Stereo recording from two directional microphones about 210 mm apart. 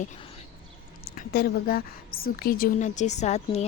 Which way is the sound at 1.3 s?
45° left (ahead or behind).